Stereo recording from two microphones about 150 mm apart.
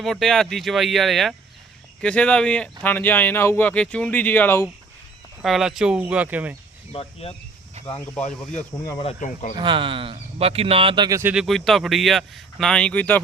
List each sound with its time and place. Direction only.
0.0 s speech: centre (ahead or behind)
5.4 s speech: centre (ahead or behind)
6.9 s speech: 40° left (ahead or behind)
7.8 s cricket: 45° right (ahead or behind)
8.1 s speech: 10° left (ahead or behind)
8.7 s speech: 30° left (ahead or behind)
9.2 s speech: 60° left (ahead or behind)
9.6 s speech: 35° right (ahead or behind)
11.2 s speech: 10° right (ahead or behind)
11.4 s speech: centre (ahead or behind)